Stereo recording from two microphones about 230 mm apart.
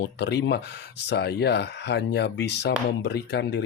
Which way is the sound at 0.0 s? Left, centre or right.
Left.